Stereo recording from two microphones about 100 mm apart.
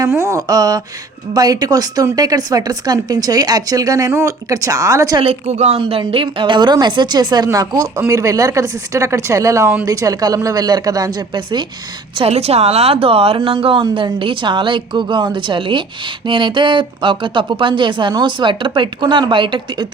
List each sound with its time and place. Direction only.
0.2 s speech: 30° right (ahead or behind)
5.2 s a woman's voice: 80° right
6.0 s speech: 60° right (ahead or behind); by 11.1 s 40° right (ahead or behind)
12.1 s a woman's voice: 80° right; by 19.9 s 50° right (ahead or behind)